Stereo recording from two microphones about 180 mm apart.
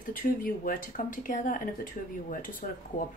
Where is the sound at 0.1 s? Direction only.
50° left (ahead or behind).